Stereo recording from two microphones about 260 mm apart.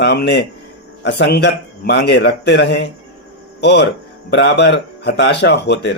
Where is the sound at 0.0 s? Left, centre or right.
Left.